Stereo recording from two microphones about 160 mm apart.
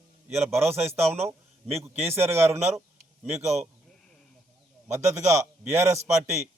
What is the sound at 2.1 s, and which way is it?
Speech, 15° right (ahead or behind).